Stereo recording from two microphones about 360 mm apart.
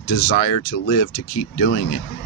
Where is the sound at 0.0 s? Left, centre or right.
Left.